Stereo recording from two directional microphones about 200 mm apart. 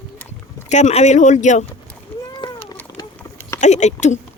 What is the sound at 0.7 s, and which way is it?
Speech, 35° left (ahead or behind).